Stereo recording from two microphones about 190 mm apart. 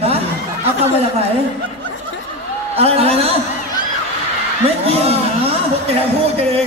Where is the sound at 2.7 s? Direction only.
30° right (ahead or behind).